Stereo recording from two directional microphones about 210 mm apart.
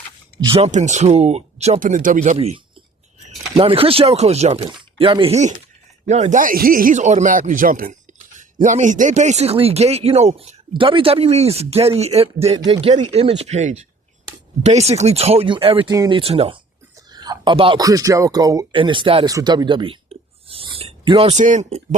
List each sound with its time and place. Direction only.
0.3 s speech: 25° right (ahead or behind)